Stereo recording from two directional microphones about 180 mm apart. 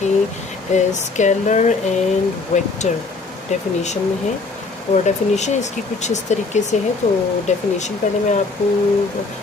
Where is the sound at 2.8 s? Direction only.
40° left (ahead or behind).